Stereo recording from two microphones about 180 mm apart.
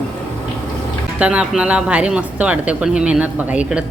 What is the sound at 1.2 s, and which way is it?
Speech, 5° right (ahead or behind).